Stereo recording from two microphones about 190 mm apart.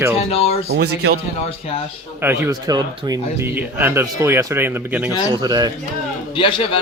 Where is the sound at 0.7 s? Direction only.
60° right (ahead or behind).